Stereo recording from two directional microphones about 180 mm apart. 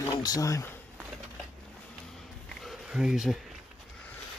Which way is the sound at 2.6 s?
Centre (ahead or behind).